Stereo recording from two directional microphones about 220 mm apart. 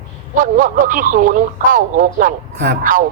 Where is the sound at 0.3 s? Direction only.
35° right (ahead or behind).